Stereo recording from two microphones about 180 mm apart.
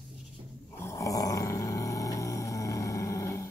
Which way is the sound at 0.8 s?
15° left (ahead or behind).